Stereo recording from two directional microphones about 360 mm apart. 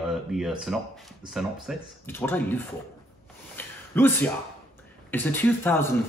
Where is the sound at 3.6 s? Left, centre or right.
Centre.